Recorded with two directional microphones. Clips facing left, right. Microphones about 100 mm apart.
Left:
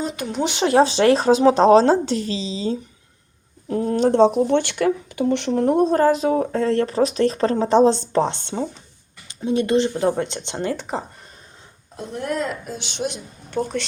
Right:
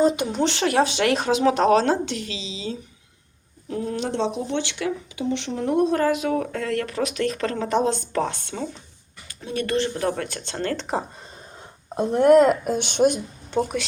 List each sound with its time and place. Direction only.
0.4 s speech: 20° left (ahead or behind); by 5.6 s 55° left (ahead or behind)
5.6 s speech: 35° left (ahead or behind); by 10.8 s 15° left (ahead or behind)
11.9 s speech: 55° right (ahead or behind)
13.5 s speech: 15° right (ahead or behind)